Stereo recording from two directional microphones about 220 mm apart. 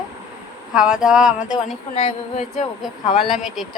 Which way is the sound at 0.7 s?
5° right (ahead or behind).